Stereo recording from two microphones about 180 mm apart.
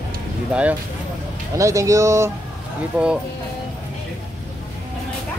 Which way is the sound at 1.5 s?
15° right (ahead or behind).